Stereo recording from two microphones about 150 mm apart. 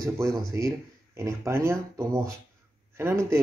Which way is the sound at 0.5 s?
20° right (ahead or behind).